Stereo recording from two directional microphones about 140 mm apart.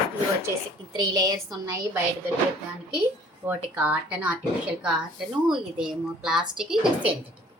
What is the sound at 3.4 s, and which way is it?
A woman's voice, 10° right (ahead or behind).